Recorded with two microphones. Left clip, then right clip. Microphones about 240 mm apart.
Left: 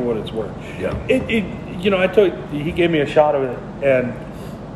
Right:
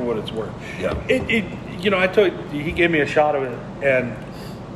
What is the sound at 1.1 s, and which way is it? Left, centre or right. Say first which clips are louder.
A man's voice: left 2 dB; centre.